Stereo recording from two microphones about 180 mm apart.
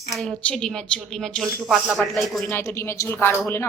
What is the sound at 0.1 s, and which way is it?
Speech, centre (ahead or behind).